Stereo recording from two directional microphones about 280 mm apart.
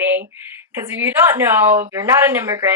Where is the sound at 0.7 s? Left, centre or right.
Centre.